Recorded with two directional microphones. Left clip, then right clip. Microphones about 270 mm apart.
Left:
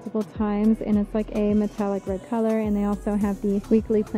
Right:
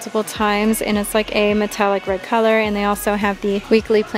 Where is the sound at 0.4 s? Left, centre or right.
Centre.